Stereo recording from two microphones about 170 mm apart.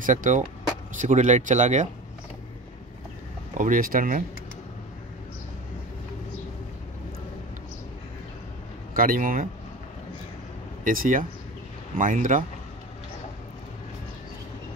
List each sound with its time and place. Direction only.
0.0 s speech: 50° right (ahead or behind)
3.5 s speech: 50° right (ahead or behind)
8.9 s speech: 55° right (ahead or behind)
10.8 s speech: 55° right (ahead or behind)